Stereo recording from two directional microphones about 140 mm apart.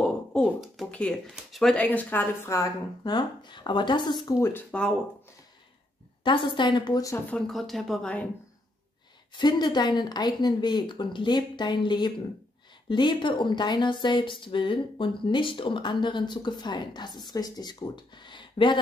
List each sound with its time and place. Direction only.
0.0 s speech: 5° left (ahead or behind)
3.0 s speech: 30° left (ahead or behind)
4.4 s speech: 15° left (ahead or behind)
6.2 s speech: 35° left (ahead or behind)
7.2 s speech: 5° left (ahead or behind)
9.3 s speech: 30° left (ahead or behind)